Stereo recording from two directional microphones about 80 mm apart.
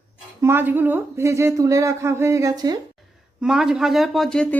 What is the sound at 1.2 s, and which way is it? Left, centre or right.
Speech, right.